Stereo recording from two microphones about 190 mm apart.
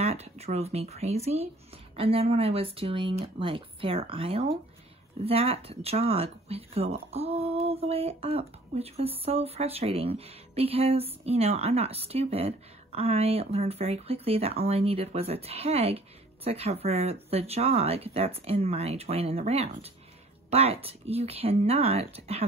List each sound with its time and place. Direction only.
0.0 s speech: 35° right (ahead or behind)